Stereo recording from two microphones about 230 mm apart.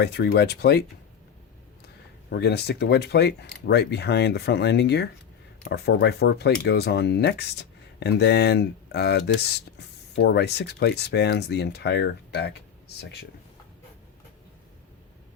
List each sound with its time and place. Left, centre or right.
0.0 s speech: left
2.3 s speech: left